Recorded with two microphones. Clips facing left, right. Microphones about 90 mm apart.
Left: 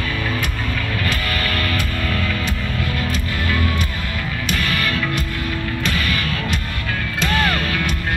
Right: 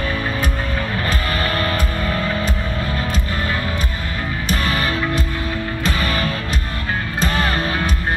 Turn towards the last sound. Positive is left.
turn(degrees=-30)  # may be behind; listen again after turning